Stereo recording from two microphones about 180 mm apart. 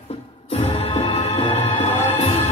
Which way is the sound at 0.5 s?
35° left (ahead or behind).